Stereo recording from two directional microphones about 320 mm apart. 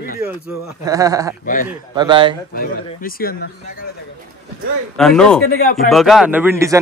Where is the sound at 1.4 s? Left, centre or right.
Left.